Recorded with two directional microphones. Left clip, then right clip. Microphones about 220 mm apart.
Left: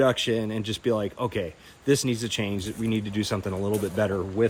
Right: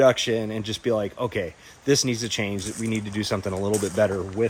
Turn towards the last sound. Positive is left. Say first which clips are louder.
# right 3 dB
turn(degrees=-15)  # may be behind; listen again after turning